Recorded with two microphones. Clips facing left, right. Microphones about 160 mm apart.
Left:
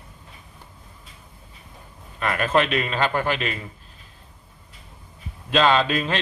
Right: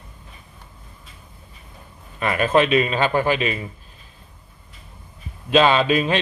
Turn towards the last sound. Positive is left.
turn(degrees=-15)  # may be behind; listen again after turning